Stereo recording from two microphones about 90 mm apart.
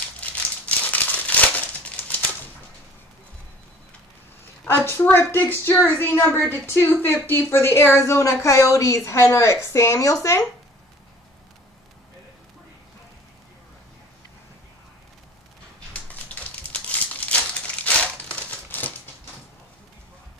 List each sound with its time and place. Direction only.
0.2 s crumpling: 15° left (ahead or behind)
4.6 s a woman's voice: 25° left (ahead or behind)
16.7 s crumpling: 15° left (ahead or behind)